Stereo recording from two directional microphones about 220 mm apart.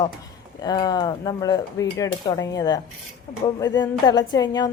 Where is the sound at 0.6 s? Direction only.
15° left (ahead or behind).